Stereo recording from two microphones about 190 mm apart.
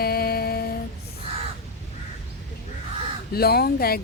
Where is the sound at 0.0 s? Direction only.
55° left (ahead or behind).